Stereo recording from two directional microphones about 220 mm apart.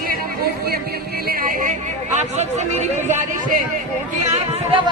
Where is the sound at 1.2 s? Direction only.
40° right (ahead or behind).